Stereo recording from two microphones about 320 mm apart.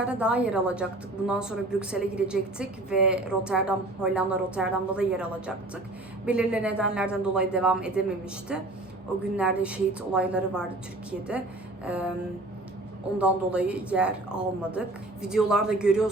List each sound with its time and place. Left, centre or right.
0.0 s a woman's voice: centre
9.4 s a woman's voice: centre
11.9 s a woman's voice: centre
13.1 s a woman's voice: centre